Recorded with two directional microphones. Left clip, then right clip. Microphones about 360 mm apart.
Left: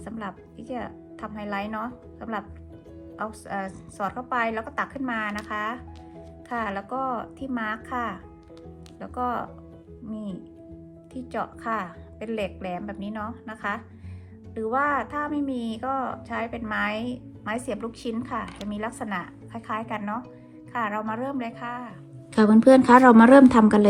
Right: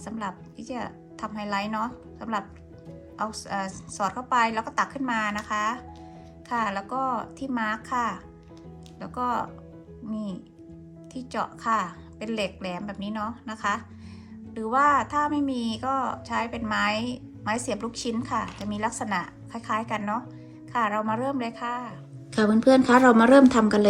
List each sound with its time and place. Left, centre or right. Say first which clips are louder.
0.0 s a woman's voice: right 2 dB; centre
22.4 s a woman's voice: left 3 dB; left